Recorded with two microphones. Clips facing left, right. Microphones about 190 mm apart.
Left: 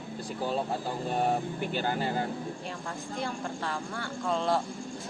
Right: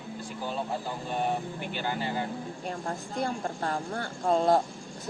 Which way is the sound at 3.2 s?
40° right (ahead or behind).